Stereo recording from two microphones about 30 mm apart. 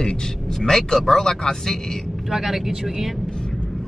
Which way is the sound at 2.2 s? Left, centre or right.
Centre.